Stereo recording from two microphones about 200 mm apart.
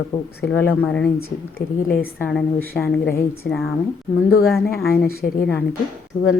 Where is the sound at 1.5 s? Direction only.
45° left (ahead or behind).